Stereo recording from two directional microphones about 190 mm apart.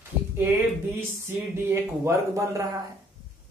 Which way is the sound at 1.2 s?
15° right (ahead or behind).